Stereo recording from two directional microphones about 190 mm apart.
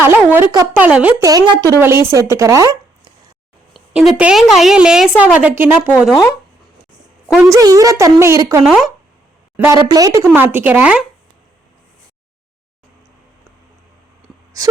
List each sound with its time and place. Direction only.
0.0 s speech: 10° right (ahead or behind)
0.9 s a woman's voice: 5° right (ahead or behind)
1.2 s speech: 20° right (ahead or behind)
3.7 s a woman's voice: centre (ahead or behind)
7.4 s speech: 15° right (ahead or behind)
9.7 s speech: 20° right (ahead or behind)
14.6 s speech: 20° right (ahead or behind)